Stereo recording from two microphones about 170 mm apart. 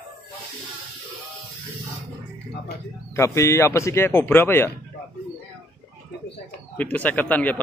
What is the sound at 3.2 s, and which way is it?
Speech, 15° left (ahead or behind).